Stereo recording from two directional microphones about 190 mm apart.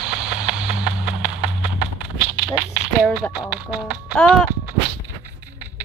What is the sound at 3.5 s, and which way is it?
Speech, 5° right (ahead or behind).